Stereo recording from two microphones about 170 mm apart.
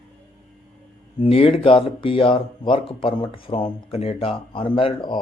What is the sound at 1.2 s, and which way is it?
Speech, 35° left (ahead or behind).